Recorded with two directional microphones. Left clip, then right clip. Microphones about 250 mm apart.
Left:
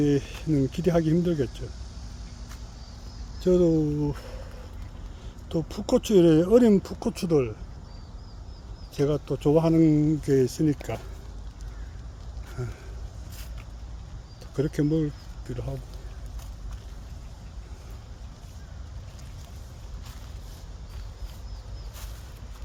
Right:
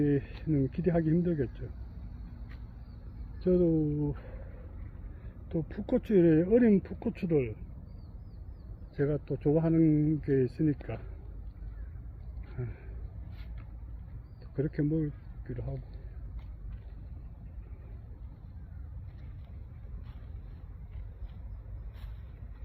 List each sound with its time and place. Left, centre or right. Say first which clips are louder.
0.0 s speech: left 5 dB; centre
3.4 s speech: left 6 dB; centre
5.5 s speech: left 7 dB; centre
9.0 s speech: left 6 dB; centre
14.5 s speech: left 6 dB; left